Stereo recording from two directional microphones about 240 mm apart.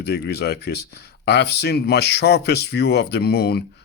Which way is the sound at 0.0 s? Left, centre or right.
Left.